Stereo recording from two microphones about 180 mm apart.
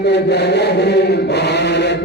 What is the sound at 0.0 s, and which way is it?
Chant, 70° left (ahead or behind).